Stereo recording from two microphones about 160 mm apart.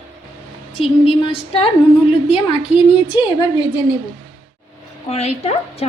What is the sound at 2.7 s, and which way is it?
Speech, 10° right (ahead or behind).